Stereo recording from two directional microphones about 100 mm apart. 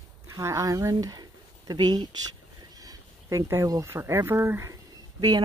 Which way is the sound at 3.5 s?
30° right (ahead or behind).